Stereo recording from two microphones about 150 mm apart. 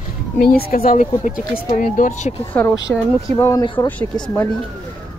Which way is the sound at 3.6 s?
30° left (ahead or behind).